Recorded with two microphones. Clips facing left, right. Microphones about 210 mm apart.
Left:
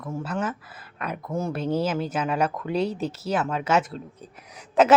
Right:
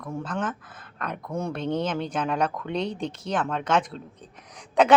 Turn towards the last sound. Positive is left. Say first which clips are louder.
# left 1 dB
turn(degrees=5)  # may be behind; listen again after turning